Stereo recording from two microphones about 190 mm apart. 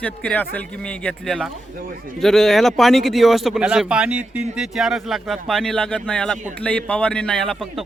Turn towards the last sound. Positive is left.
turn(degrees=0)  # may be behind; listen again after turning